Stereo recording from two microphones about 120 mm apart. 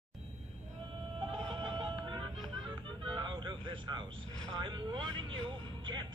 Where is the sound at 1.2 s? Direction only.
45° right (ahead or behind).